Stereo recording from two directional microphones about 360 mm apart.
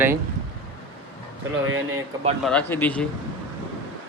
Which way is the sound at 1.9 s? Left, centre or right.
Centre.